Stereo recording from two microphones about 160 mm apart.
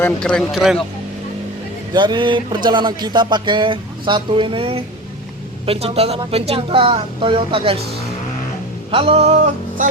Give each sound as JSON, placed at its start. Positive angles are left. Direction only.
{"t": 0.0, "sound": "speech", "side_deg": 5}
{"t": 1.9, "sound": "speech", "side_deg": -30}
{"t": 8.9, "sound": "speech", "side_deg": -35}